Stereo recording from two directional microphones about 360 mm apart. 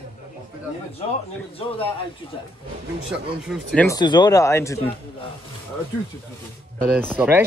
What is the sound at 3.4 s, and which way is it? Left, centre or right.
Speech, centre.